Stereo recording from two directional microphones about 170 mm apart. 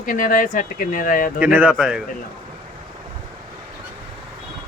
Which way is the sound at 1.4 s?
10° right (ahead or behind).